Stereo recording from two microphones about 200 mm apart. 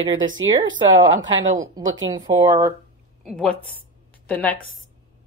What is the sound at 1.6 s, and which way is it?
Speech, 15° right (ahead or behind).